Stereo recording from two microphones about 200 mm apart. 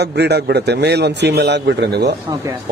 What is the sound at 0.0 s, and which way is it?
Speech, 55° right (ahead or behind).